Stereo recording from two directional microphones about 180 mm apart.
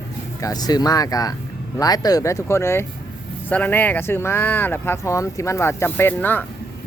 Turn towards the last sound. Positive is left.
turn(degrees=10)  # may be behind; listen again after turning